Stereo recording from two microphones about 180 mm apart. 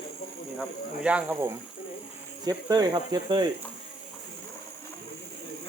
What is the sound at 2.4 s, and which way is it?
Speech, 20° right (ahead or behind).